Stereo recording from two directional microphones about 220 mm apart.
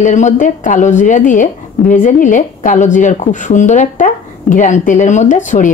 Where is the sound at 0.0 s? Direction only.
35° left (ahead or behind).